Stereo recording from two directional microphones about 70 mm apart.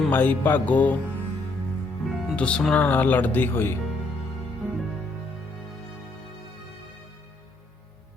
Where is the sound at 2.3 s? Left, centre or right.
Centre; by 3.7 s left.